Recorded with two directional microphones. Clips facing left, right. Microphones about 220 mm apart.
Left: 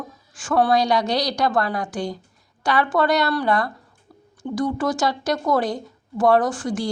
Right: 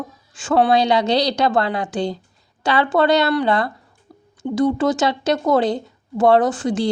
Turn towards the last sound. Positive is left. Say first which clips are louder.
# right 3 dB
turn(degrees=-20)  # may be behind; listen again after turning